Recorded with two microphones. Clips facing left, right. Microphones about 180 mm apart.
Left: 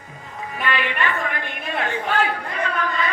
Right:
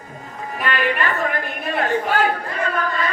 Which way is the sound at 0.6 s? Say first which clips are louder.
Right 2 dB; 45° right (ahead or behind).